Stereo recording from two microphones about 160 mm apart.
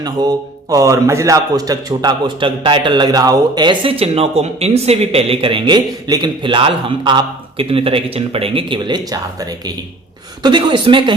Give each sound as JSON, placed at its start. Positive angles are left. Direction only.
{"t": 0.0, "sound": "a man's voice", "side_deg": -25}